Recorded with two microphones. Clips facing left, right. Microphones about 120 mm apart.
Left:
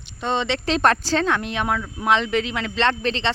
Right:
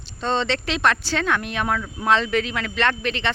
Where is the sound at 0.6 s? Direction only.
40° left (ahead or behind).